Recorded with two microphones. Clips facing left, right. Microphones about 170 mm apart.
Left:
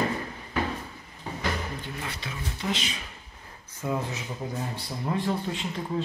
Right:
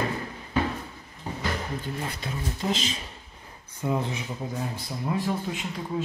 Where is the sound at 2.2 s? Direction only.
40° right (ahead or behind).